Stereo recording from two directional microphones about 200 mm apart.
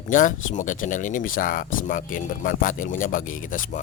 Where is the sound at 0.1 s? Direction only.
40° left (ahead or behind).